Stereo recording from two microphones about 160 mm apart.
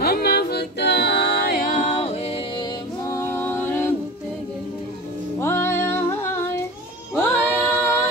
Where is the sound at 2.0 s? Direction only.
40° left (ahead or behind).